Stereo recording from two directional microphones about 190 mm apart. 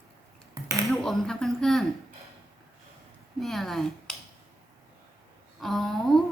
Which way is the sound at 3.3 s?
Centre (ahead or behind).